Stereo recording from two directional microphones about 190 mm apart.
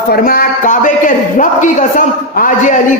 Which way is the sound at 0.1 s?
50° left (ahead or behind).